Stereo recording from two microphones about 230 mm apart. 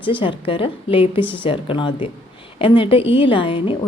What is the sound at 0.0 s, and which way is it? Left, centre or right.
A woman's voice, left.